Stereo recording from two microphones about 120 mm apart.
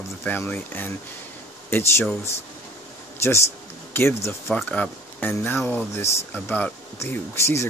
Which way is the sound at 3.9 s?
20° left (ahead or behind).